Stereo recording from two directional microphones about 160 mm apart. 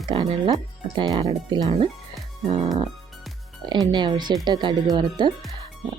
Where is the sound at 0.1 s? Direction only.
30° right (ahead or behind).